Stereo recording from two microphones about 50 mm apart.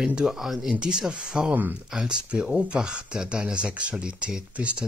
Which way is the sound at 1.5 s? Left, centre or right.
Right.